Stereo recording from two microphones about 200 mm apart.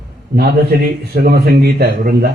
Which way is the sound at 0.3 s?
50° right (ahead or behind).